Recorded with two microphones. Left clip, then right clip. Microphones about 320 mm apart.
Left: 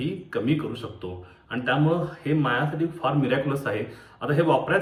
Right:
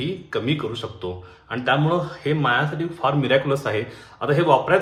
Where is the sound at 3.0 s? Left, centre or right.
Centre.